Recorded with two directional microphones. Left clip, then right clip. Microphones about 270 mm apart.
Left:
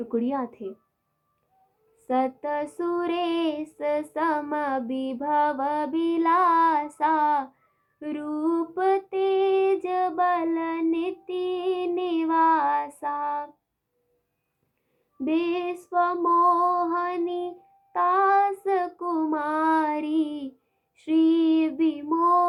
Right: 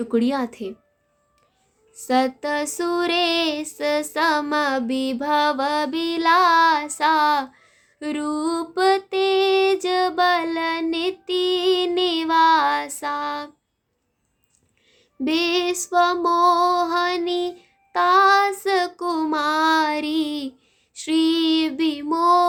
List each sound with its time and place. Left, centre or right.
0.0 s female singing: right
2.0 s female singing: right
15.2 s female singing: right